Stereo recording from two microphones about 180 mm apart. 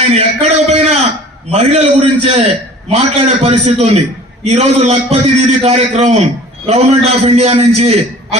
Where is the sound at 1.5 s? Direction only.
35° right (ahead or behind).